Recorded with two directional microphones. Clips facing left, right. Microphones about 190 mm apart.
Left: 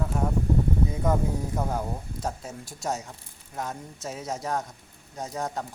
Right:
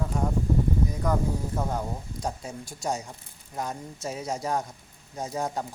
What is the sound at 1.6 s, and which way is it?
Speech, 5° left (ahead or behind).